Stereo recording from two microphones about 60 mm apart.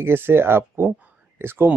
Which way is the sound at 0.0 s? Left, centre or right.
Right.